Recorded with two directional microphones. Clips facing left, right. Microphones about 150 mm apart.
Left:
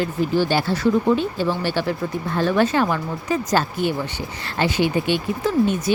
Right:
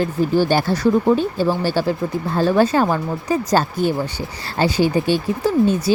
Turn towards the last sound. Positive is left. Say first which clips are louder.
# right 3 dB
turn(degrees=-35)  # may be behind; listen again after turning